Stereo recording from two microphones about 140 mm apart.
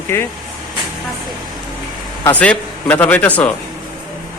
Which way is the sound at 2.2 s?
10° left (ahead or behind).